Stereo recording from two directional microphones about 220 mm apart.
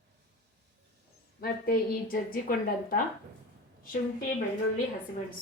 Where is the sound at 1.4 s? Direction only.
45° left (ahead or behind).